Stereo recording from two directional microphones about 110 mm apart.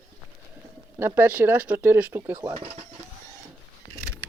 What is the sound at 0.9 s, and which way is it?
Speech, 20° right (ahead or behind).